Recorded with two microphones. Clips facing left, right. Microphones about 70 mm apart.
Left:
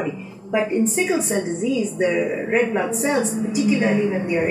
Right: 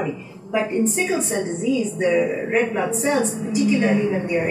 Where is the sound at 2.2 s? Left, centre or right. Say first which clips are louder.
Even; centre.